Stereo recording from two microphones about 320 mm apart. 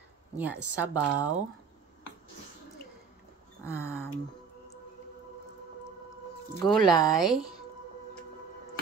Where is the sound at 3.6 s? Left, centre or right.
Centre.